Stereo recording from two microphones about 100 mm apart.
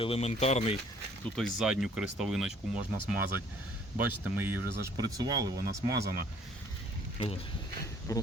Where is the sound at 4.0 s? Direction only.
20° right (ahead or behind).